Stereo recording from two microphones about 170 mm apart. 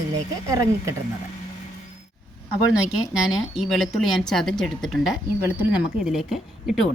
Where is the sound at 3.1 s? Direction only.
5° right (ahead or behind).